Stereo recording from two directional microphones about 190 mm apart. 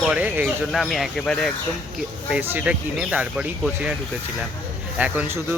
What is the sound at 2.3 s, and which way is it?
Speech, 10° right (ahead or behind).